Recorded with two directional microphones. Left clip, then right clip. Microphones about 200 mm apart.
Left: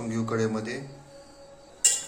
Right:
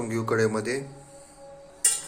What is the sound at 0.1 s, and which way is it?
Speech, 25° right (ahead or behind).